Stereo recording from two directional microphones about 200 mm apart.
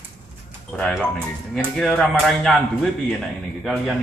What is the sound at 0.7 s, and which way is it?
A man's voice, 5° left (ahead or behind).